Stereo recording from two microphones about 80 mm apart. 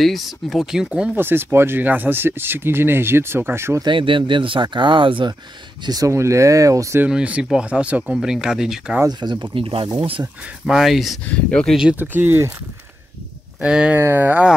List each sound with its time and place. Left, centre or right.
0.0 s speech: centre
1.1 s speech: right
3.8 s speech: right
5.9 s speech: right
7.1 s speech: centre
9.2 s speech: right
10.7 s speech: centre
11.2 s speech: centre
11.9 s speech: right
13.6 s speech: centre
13.9 s speech: right